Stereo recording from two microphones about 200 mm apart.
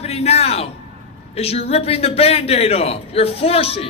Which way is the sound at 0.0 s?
30° left (ahead or behind).